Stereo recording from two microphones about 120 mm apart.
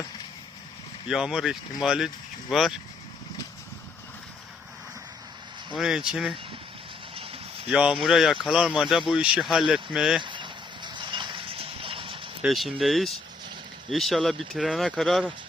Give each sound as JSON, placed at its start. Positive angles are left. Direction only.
{"t": 1.0, "sound": "speech", "side_deg": -5}
{"t": 5.7, "sound": "speech", "side_deg": -5}
{"t": 7.7, "sound": "speech", "side_deg": -5}
{"t": 10.2, "sound": "a sound", "side_deg": -40}
{"t": 12.4, "sound": "speech", "side_deg": 0}